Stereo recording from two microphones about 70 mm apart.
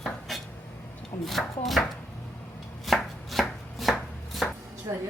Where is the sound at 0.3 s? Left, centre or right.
Centre.